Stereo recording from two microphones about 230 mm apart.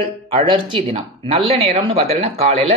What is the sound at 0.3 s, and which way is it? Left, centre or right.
Speech, right.